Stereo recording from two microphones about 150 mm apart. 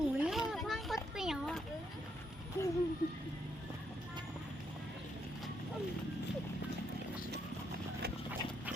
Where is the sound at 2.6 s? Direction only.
20° left (ahead or behind).